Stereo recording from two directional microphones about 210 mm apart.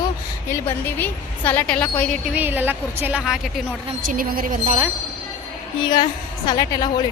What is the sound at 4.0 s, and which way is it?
Speech, 40° right (ahead or behind).